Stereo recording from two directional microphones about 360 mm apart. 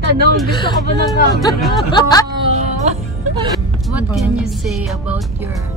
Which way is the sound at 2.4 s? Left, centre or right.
Centre.